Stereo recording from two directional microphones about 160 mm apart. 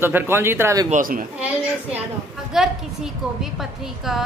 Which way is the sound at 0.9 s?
60° right (ahead or behind).